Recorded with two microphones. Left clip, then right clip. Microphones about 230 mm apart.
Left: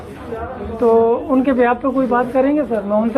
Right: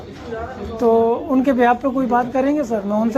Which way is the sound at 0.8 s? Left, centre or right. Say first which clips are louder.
Left 2 dB; right.